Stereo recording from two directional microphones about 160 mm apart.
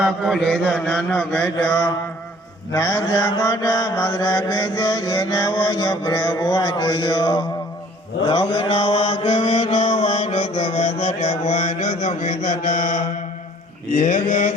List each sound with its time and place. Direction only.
0.0 s mantra: centre (ahead or behind); by 14.5 s 55° left (ahead or behind)